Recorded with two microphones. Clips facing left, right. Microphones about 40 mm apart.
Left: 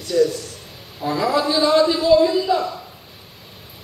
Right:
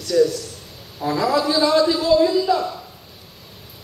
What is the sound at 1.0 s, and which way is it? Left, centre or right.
A man's voice, centre.